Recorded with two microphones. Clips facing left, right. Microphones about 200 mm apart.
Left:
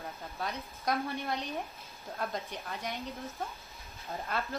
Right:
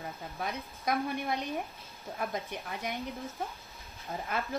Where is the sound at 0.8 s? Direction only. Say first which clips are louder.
Right 2 dB; 15° right (ahead or behind).